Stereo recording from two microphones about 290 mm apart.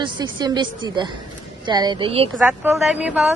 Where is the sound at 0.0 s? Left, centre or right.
Centre.